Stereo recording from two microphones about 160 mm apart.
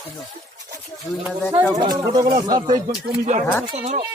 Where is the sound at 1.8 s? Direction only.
25° right (ahead or behind).